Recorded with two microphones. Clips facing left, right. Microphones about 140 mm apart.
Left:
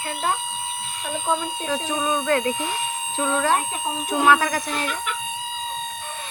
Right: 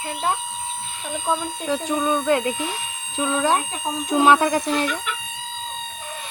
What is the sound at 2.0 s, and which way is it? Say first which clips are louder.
Speech: right 1 dB; 10° left (ahead or behind).